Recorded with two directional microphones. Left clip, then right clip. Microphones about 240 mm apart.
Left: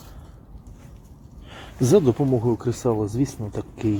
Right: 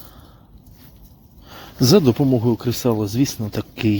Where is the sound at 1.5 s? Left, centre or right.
Right.